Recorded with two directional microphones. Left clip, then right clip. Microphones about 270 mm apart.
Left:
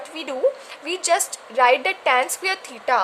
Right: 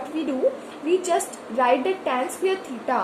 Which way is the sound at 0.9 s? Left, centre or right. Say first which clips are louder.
Left 1 dB; left.